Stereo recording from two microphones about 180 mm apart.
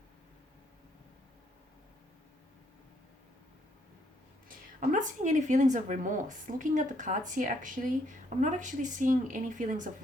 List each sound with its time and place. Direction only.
4.4 s a woman's voice: 45° right (ahead or behind)